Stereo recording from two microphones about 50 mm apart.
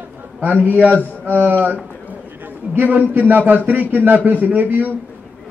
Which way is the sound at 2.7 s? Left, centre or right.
Right.